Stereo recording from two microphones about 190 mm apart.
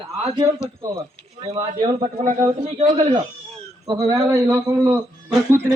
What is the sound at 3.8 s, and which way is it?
A man's voice, 25° right (ahead or behind).